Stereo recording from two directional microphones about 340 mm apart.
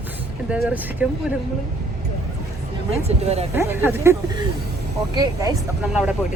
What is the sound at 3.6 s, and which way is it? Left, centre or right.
Speech, centre.